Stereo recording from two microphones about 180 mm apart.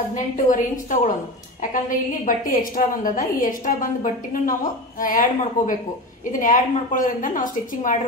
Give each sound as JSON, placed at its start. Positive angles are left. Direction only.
{"t": 0.1, "sound": "a woman's voice", "side_deg": 45}